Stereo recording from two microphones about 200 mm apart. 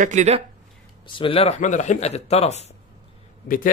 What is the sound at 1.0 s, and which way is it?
Speech, 25° left (ahead or behind).